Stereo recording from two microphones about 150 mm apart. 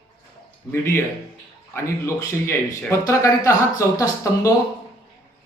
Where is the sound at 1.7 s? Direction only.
15° left (ahead or behind).